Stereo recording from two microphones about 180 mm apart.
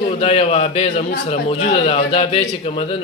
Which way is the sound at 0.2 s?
35° left (ahead or behind).